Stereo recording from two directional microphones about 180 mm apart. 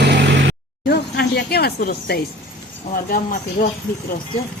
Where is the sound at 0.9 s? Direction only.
65° left (ahead or behind).